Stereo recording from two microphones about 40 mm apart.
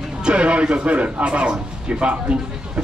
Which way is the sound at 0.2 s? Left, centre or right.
Right.